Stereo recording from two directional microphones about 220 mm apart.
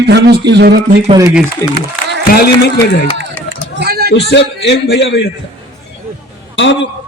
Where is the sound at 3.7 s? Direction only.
45° right (ahead or behind).